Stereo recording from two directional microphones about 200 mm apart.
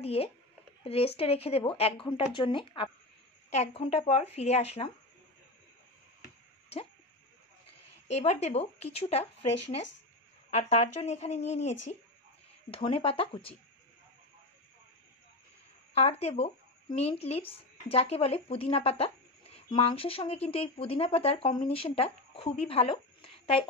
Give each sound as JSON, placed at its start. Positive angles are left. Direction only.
{"t": 0.0, "sound": "speech", "side_deg": 30}
{"t": 8.1, "sound": "speech", "side_deg": 30}
{"t": 15.9, "sound": "speech", "side_deg": 30}